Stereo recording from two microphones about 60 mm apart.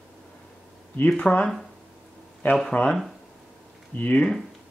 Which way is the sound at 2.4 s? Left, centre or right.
Left.